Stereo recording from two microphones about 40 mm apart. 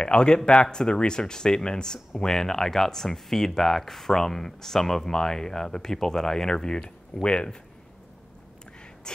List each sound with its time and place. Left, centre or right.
0.0 s speech: left